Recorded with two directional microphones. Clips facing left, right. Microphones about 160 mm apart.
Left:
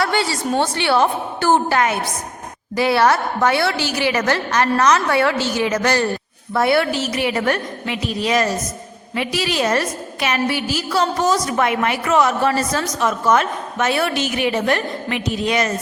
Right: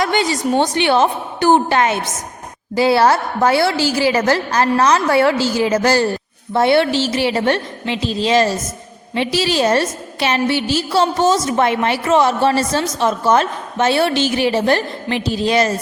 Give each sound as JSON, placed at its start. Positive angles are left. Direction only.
{"t": 0.0, "sound": "a woman's voice", "side_deg": -20}